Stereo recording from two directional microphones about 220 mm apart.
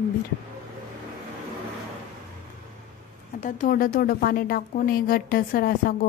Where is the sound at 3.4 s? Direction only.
35° left (ahead or behind).